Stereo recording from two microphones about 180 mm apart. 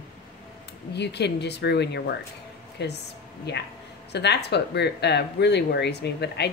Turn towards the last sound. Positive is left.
turn(degrees=70)  # may be behind; listen again after turning